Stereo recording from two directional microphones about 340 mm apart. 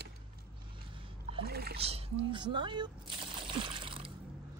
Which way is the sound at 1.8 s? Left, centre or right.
Centre.